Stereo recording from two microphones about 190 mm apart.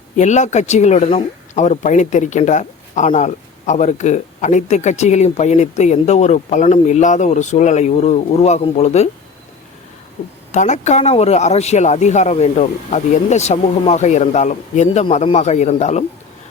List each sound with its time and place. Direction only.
0.2 s speech: 40° left (ahead or behind)
10.5 s speech: 40° left (ahead or behind)